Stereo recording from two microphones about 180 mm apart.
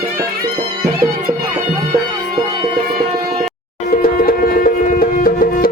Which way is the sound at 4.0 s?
55° left (ahead or behind).